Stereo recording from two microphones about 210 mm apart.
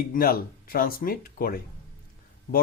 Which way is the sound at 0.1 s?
45° left (ahead or behind).